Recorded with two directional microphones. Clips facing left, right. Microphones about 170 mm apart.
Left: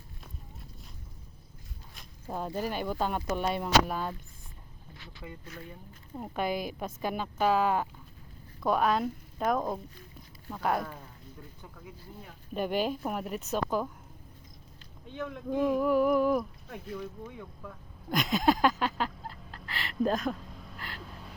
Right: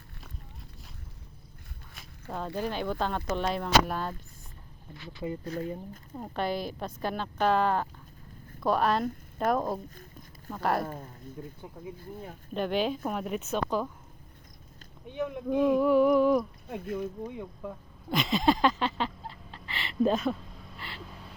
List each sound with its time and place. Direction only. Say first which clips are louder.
2.2 s speech: even; 5° left (ahead or behind)
5.2 s speech: right 12 dB; 35° right (ahead or behind)
6.1 s a woman's voice: even; 10° left (ahead or behind)
9.9 s a sound: right 2 dB; 45° right (ahead or behind)
10.5 s a woman's voice: right 1 dB; centre (ahead or behind)
10.8 s speech: right 5 dB; 45° right (ahead or behind)
11.4 s speech: right 9 dB; 25° right (ahead or behind)
11.9 s speech: right 6 dB; 45° right (ahead or behind)
12.5 s a woman's voice: right 1 dB; 10° left (ahead or behind)
15.0 s speech: right 4 dB; 20° right (ahead or behind)
15.8 s speech: right 3 dB; 5° left (ahead or behind)
17.0 s speech: right 6 dB; 20° right (ahead or behind)
18.1 s a sound: right 1 dB; centre (ahead or behind)